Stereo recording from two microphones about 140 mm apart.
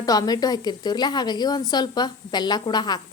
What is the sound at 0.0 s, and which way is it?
A woman's voice, 25° left (ahead or behind).